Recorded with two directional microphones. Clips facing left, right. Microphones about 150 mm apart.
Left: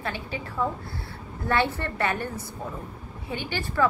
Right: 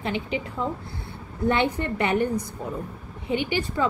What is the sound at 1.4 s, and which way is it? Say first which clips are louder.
A woman's voice: right 3 dB; 15° right (ahead or behind).